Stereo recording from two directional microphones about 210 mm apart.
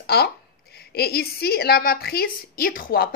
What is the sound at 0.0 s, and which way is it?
A woman's voice, 50° left (ahead or behind).